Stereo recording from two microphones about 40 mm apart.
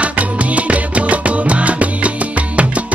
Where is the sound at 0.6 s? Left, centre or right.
Right.